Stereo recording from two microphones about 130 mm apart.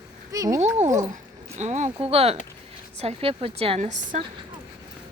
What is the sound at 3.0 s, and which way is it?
Speech, 50° right (ahead or behind).